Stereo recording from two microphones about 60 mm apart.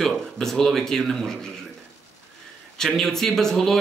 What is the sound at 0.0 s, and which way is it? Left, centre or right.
Speech, centre.